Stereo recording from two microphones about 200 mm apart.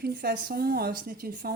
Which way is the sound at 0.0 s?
50° right (ahead or behind).